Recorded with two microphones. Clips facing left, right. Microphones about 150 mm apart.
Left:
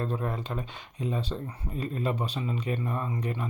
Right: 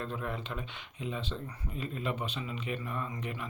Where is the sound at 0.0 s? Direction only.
40° left (ahead or behind).